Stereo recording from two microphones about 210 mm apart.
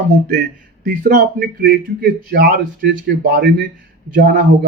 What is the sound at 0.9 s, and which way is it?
A man's voice, 45° right (ahead or behind).